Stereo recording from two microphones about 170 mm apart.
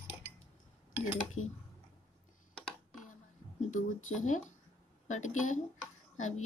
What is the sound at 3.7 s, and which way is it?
Speech, 45° left (ahead or behind).